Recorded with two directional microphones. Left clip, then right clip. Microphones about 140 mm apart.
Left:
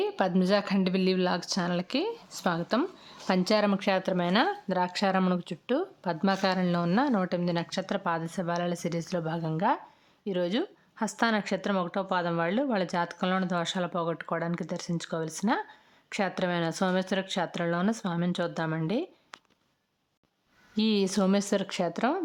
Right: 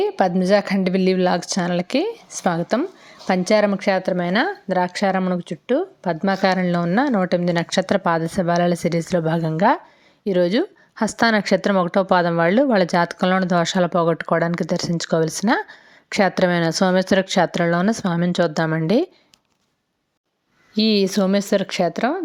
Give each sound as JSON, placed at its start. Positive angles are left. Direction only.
{"t": 0.0, "sound": "a woman's voice", "side_deg": -25}
{"t": 20.7, "sound": "a woman's voice", "side_deg": -25}